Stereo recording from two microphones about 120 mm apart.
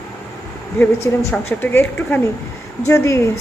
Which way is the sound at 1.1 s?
20° left (ahead or behind).